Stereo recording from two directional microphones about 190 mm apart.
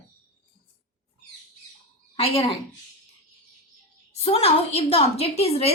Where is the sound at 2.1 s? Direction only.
30° left (ahead or behind).